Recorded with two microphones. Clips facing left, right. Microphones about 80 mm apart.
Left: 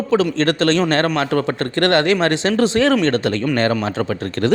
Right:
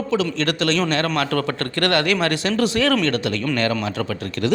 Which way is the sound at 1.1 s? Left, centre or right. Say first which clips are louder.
Left 3 dB; left.